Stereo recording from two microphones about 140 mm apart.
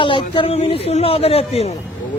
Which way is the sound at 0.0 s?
35° left (ahead or behind).